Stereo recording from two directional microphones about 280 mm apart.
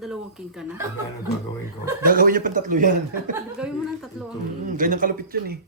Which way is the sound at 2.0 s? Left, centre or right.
Right.